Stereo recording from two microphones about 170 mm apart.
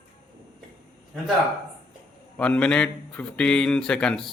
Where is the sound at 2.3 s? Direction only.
5° left (ahead or behind).